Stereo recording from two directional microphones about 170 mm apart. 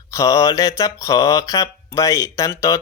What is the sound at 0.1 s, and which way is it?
Speech, 20° left (ahead or behind).